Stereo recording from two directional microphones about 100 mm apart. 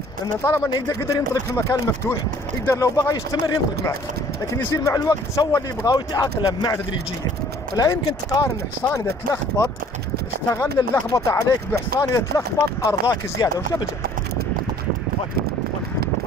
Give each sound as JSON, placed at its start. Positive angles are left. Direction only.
{"t": 1.0, "sound": "speech", "side_deg": 35}
{"t": 3.0, "sound": "speech", "side_deg": 40}
{"t": 5.9, "sound": "speech", "side_deg": 40}
{"t": 13.1, "sound": "speech", "side_deg": 40}